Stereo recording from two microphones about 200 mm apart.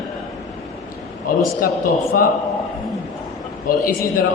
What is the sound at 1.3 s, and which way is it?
Speech, 45° left (ahead or behind).